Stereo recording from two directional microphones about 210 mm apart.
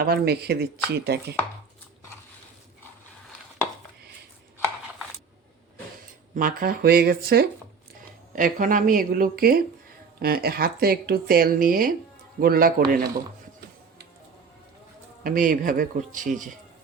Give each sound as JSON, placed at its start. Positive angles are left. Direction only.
{"t": 0.0, "sound": "speech", "side_deg": -50}
{"t": 6.3, "sound": "speech", "side_deg": -40}
{"t": 15.2, "sound": "speech", "side_deg": -40}